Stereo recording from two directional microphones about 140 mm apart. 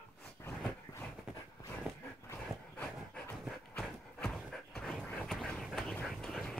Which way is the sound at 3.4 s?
5° left (ahead or behind).